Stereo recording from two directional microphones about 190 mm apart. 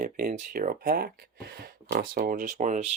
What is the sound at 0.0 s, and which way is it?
Speech, 40° right (ahead or behind).